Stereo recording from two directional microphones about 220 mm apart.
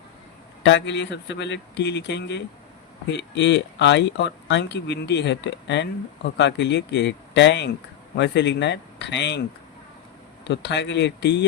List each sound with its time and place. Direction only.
0.6 s speech: 55° left (ahead or behind)
10.5 s speech: 50° left (ahead or behind)